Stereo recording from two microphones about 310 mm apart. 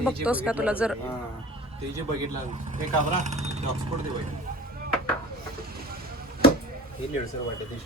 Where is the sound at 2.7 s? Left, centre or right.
Right.